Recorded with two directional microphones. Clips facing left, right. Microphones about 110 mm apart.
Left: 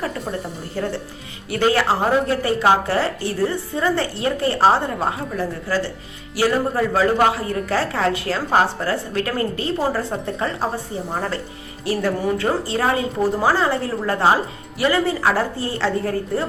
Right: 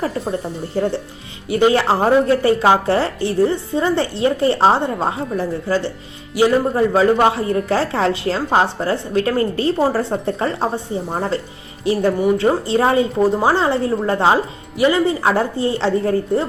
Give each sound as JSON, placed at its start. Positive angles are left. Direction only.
{"t": 1.5, "sound": "speech", "side_deg": -20}
{"t": 6.3, "sound": "speech", "side_deg": -20}